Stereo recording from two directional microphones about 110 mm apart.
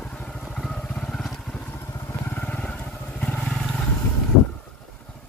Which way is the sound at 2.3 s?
10° left (ahead or behind).